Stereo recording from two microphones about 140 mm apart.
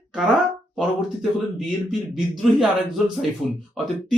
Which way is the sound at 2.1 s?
5° right (ahead or behind).